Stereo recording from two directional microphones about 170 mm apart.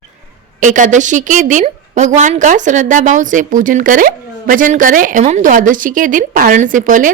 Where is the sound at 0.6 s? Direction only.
50° right (ahead or behind).